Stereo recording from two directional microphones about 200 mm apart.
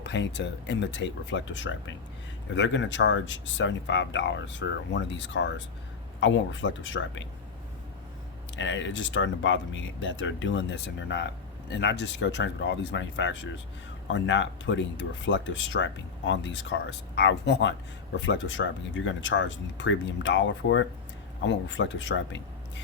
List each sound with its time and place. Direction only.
0.0 s speech: 60° left (ahead or behind)
8.5 s speech: 65° left (ahead or behind)